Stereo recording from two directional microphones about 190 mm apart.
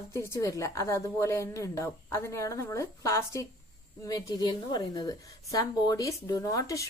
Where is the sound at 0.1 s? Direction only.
15° left (ahead or behind).